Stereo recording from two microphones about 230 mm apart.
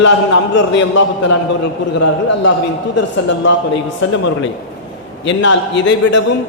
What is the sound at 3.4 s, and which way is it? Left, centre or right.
Speech, left.